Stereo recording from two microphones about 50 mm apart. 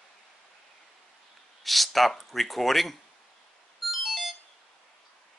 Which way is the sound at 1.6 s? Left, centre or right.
Centre.